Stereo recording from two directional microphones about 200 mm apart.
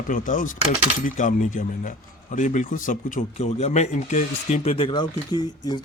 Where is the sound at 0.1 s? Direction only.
40° left (ahead or behind).